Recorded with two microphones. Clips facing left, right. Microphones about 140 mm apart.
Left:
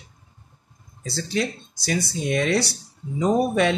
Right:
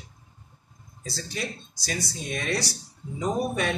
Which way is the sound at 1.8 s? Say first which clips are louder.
Left 8 dB; 65° left (ahead or behind).